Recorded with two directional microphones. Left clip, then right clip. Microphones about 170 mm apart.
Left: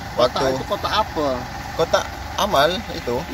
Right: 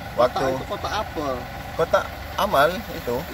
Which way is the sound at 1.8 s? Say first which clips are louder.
Left 1 dB; centre (ahead or behind).